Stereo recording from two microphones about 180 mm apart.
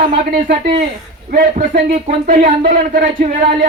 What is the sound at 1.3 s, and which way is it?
Speech, 50° right (ahead or behind).